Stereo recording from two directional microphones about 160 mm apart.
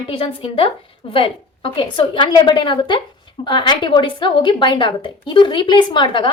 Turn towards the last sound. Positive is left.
turn(degrees=30)  # may be behind; listen again after turning